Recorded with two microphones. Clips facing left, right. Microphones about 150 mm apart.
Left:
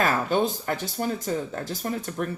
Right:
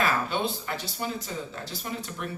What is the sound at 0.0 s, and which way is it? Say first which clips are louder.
Speech: left 4 dB; 45° left (ahead or behind).